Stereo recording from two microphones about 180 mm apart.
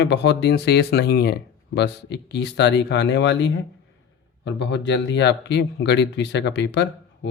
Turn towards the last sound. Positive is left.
turn(degrees=75)  # may be behind; listen again after turning